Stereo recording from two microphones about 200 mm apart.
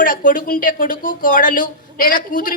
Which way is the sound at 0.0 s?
45° left (ahead or behind).